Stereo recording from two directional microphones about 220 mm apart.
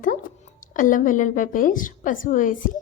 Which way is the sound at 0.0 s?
35° left (ahead or behind).